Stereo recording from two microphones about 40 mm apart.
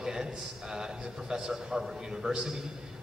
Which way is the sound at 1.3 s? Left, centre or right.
Centre.